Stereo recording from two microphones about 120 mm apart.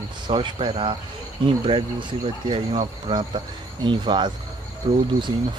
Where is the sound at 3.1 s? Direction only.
40° right (ahead or behind).